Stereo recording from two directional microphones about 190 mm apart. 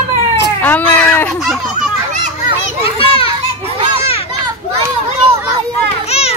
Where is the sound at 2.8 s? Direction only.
30° left (ahead or behind).